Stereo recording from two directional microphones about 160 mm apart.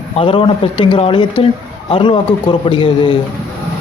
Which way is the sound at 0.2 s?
30° left (ahead or behind).